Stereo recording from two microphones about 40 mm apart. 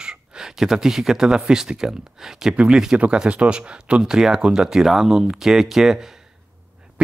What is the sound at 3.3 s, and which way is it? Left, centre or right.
Speech, right.